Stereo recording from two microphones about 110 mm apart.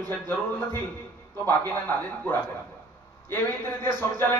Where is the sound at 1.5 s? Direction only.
15° left (ahead or behind).